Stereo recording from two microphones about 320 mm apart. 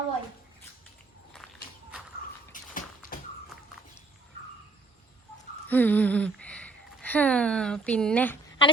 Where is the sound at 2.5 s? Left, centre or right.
Left.